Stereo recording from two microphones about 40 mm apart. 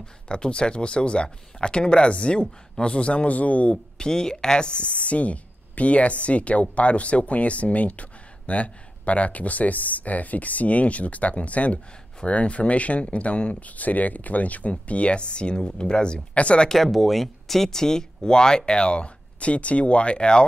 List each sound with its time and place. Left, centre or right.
0.0 s speech: left
3.7 s speech: centre
16.6 s speech: centre; by 20.4 s left